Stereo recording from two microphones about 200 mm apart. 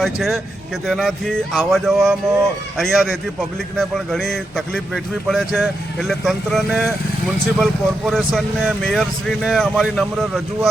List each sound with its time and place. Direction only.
0.0 s speech: centre (ahead or behind)